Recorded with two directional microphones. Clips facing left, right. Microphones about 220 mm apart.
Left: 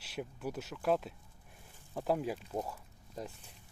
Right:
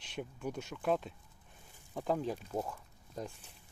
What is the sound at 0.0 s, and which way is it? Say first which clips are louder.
Speech: even; 5° left (ahead or behind).